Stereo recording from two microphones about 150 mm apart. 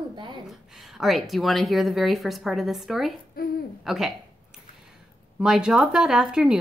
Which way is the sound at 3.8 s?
Centre (ahead or behind).